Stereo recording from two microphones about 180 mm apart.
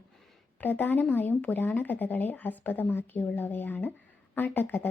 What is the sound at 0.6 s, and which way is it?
A woman's voice, 10° left (ahead or behind).